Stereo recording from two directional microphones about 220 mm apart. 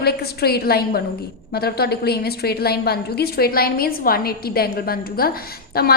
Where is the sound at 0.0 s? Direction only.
45° left (ahead or behind).